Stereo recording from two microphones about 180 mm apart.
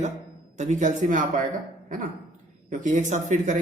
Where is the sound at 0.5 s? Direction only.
40° right (ahead or behind).